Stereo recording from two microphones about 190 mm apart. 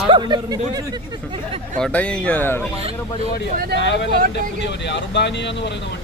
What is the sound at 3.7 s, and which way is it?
Speech, 70° left (ahead or behind).